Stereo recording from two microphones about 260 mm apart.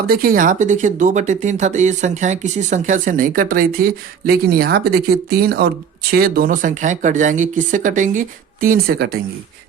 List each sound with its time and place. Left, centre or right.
0.1 s speech: right